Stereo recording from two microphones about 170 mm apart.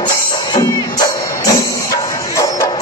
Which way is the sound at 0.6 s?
20° left (ahead or behind).